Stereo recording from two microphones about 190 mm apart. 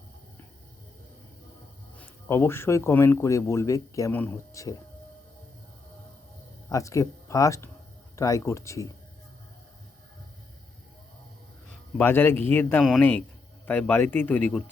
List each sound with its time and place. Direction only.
2.0 s speech: 10° left (ahead or behind)
6.7 s speech: 15° left (ahead or behind)
11.9 s speech: 10° left (ahead or behind)